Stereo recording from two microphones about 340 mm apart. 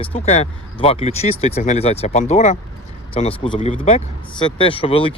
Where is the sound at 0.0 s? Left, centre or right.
Centre.